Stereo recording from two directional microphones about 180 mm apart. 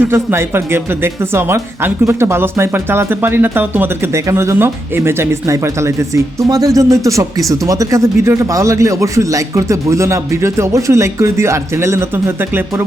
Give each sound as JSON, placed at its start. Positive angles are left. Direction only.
{"t": 0.0, "sound": "speech", "side_deg": -15}